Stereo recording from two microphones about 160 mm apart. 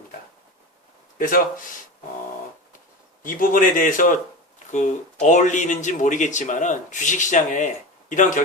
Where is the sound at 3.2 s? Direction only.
55° left (ahead or behind).